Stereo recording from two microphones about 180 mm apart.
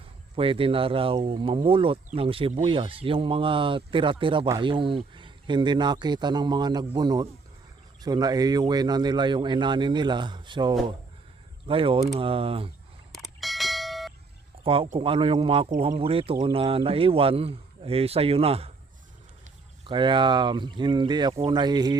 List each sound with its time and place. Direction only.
0.3 s speech: 30° right (ahead or behind)
13.1 s a sound: centre (ahead or behind)
14.6 s speech: 30° right (ahead or behind)
19.9 s speech: 25° right (ahead or behind)